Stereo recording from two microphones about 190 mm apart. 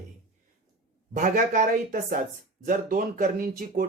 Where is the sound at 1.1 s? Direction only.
40° right (ahead or behind).